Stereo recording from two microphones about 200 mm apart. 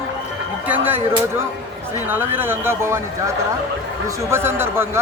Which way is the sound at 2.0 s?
10° right (ahead or behind).